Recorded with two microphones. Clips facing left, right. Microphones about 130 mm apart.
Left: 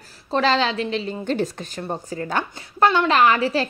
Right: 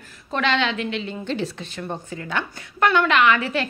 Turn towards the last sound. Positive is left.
turn(degrees=35)  # may be behind; listen again after turning